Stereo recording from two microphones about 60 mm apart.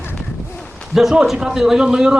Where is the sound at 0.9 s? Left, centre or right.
Centre.